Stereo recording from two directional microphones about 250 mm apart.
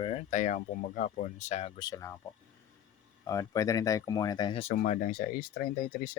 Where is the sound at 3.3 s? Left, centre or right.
Centre.